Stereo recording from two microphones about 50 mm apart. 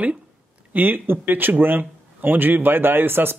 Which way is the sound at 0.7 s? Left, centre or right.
Right.